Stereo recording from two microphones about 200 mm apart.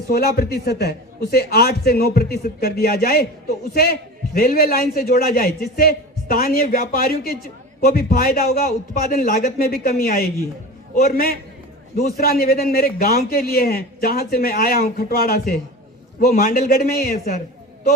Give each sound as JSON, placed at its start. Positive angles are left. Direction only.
{"t": 0.1, "sound": "a man's voice", "side_deg": 50}
{"t": 4.4, "sound": "a man's voice", "side_deg": 50}